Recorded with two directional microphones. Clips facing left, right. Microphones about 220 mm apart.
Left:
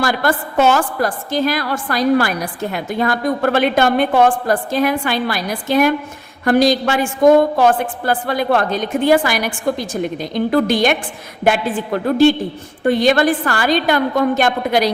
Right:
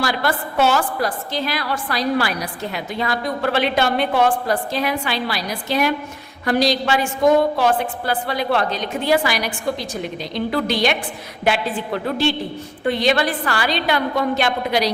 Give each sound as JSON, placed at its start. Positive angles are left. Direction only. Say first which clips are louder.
{"t": 0.0, "sound": "a woman's voice", "louder": "left 4 dB", "side_deg": 50}
{"t": 12.0, "sound": "a woman's voice", "louder": "left 10 dB", "side_deg": 45}